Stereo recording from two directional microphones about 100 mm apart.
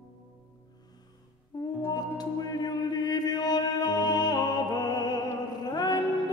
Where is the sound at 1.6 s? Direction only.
40° left (ahead or behind).